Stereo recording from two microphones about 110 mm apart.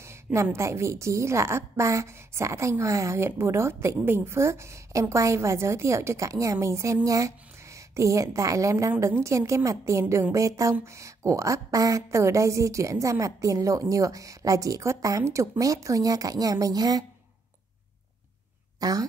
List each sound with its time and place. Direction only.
0.0 s a woman's voice: 25° right (ahead or behind)
18.8 s speech: 35° right (ahead or behind)